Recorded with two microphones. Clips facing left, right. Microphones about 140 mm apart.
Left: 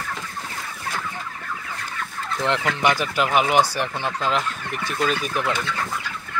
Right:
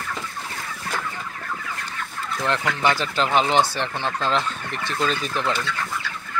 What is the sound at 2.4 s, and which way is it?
Speech, 20° left (ahead or behind).